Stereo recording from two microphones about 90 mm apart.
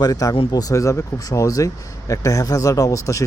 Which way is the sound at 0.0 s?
40° left (ahead or behind).